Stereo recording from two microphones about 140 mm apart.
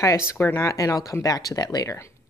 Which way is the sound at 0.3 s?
20° left (ahead or behind).